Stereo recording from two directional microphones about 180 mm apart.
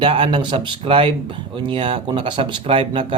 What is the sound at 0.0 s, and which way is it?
Speech, 30° right (ahead or behind).